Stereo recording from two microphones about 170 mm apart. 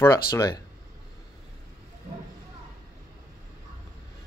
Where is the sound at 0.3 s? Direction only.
20° left (ahead or behind).